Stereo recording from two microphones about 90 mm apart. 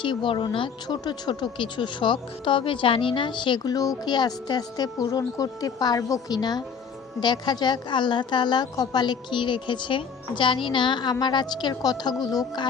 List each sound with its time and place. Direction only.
0.0 s a woman's voice: 65° left (ahead or behind)
1.0 s a woman's voice: 50° left (ahead or behind)